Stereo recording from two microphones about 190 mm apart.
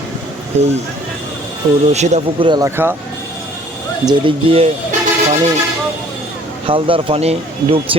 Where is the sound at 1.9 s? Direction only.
35° right (ahead or behind).